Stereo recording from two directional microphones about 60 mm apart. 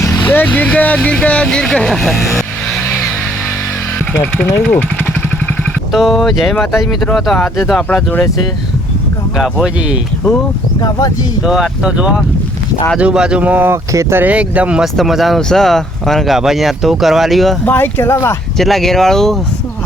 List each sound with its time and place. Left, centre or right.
0.3 s speech: left; by 2.8 s centre
4.1 s speech: left
5.9 s speech: centre
9.4 s speech: centre
11.4 s speech: centre; by 13.7 s right
13.9 s speech: right
14.2 s speech: right
14.9 s speech: centre
15.4 s speech: centre
17.7 s speech: left
18.5 s speech: centre